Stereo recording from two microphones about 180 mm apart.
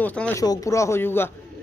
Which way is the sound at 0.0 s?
10° left (ahead or behind).